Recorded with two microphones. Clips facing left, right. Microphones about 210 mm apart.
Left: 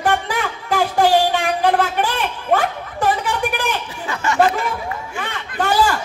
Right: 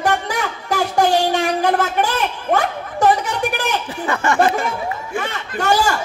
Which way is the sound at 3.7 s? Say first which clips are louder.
Right 3 dB; 55° right (ahead or behind).